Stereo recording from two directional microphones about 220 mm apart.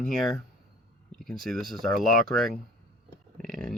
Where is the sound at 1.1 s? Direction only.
Centre (ahead or behind).